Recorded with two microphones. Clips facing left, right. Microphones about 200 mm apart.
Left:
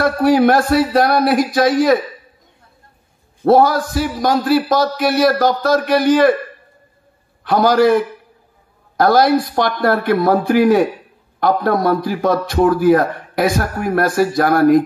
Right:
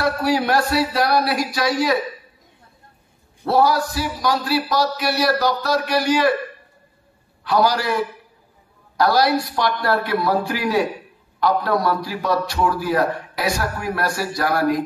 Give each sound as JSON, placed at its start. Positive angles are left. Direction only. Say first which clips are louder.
{"t": 0.0, "sound": "a man's voice", "louder": "left 7 dB", "side_deg": 50}
{"t": 3.4, "sound": "a man's voice", "louder": "left 6 dB", "side_deg": 50}
{"t": 7.4, "sound": "a man's voice", "louder": "left 7 dB", "side_deg": 50}